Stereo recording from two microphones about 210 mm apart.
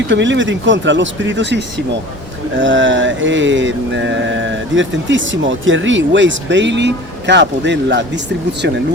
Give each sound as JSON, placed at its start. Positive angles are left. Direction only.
{"t": 0.1, "sound": "mantra", "side_deg": -60}